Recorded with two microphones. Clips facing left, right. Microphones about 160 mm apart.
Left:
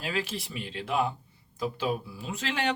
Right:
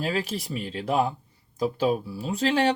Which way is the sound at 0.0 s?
40° right (ahead or behind).